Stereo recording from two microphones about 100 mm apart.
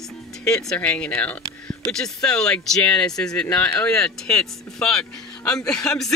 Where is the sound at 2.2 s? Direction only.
5° left (ahead or behind).